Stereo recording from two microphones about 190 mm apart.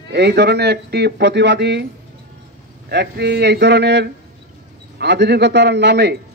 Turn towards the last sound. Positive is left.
turn(degrees=-65)  # may be behind; listen again after turning